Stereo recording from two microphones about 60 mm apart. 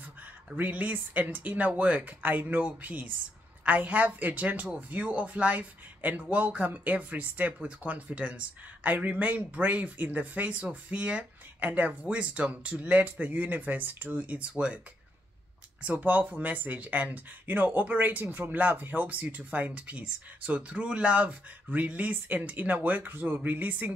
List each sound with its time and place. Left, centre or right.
0.6 s speech: right
15.8 s speech: right